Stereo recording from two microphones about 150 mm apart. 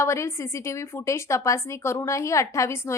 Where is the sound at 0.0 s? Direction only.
20° left (ahead or behind).